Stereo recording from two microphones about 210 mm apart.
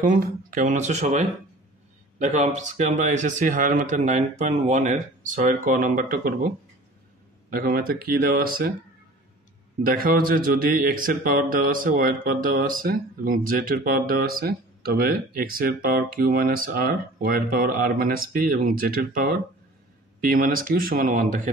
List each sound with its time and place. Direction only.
0.0 s speech: 40° right (ahead or behind)
9.8 s speech: 45° right (ahead or behind)